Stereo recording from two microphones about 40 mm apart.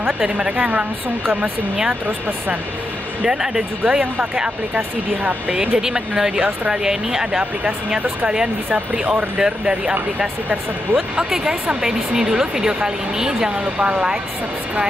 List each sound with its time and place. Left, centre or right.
0.5 s speech: right
3.3 s speech: centre
3.8 s speech: right
5.8 s speech: centre
8.7 s speech: right
11.2 s speech: centre
13.7 s speech: right